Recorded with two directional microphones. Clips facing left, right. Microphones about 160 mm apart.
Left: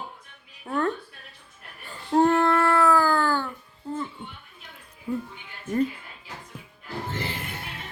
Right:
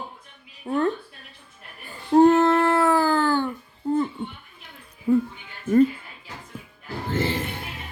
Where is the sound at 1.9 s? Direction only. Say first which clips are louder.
Right 5 dB; 15° right (ahead or behind).